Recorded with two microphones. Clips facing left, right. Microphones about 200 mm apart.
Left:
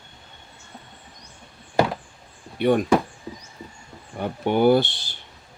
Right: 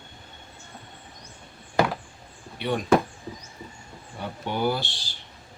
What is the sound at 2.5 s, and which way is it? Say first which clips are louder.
Speech: left 8 dB; 50° left (ahead or behind).